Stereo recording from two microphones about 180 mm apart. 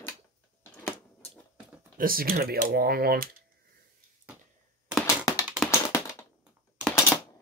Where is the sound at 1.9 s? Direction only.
55° right (ahead or behind).